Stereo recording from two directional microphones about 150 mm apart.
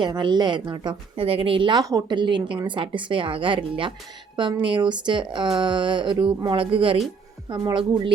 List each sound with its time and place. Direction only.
0.0 s a woman's voice: 30° right (ahead or behind)